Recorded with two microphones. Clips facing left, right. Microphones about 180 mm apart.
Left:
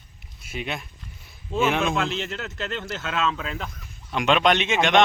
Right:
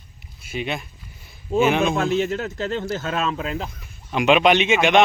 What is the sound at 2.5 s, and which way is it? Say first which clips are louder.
Speech: right 6 dB; 35° right (ahead or behind).